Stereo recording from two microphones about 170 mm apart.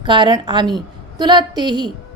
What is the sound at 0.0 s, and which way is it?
A woman's voice, 30° right (ahead or behind).